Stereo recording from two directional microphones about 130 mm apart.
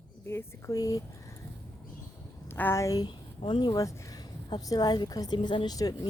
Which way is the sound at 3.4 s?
40° left (ahead or behind).